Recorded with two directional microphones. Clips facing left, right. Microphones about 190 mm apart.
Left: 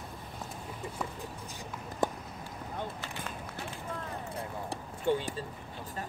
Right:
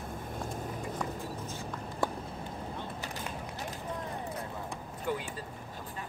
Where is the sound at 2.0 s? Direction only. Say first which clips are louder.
Left 2 dB; 20° left (ahead or behind).